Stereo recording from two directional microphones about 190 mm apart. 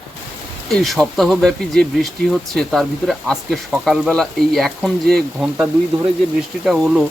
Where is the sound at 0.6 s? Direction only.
Centre (ahead or behind).